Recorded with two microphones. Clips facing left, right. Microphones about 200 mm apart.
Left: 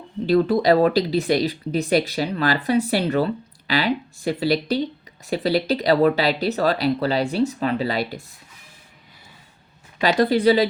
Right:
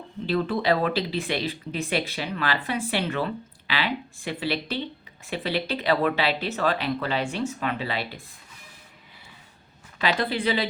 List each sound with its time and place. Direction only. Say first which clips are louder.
0.3 s speech: left 7 dB; 40° left (ahead or behind)
10.0 s speech: left 8 dB; 40° left (ahead or behind)